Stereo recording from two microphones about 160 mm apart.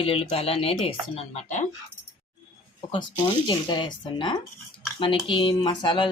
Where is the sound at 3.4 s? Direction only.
30° left (ahead or behind).